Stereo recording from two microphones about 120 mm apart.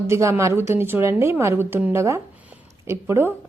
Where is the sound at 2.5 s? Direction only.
20° right (ahead or behind).